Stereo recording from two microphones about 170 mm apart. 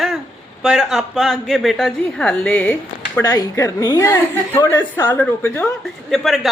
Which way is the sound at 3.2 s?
20° left (ahead or behind).